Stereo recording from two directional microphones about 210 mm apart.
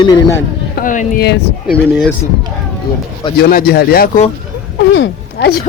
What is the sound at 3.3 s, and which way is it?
Speech, 45° left (ahead or behind).